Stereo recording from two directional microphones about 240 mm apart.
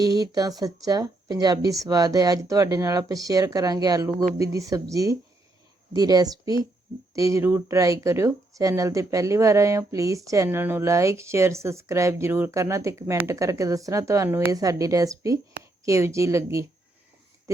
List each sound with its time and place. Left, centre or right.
0.1 s speech: centre